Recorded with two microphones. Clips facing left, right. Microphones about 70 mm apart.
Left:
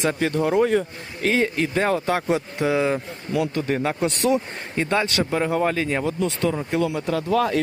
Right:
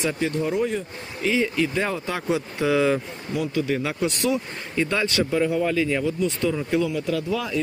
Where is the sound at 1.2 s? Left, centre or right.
Left.